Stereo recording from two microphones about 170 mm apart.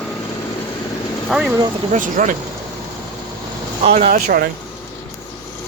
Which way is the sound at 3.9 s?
40° right (ahead or behind).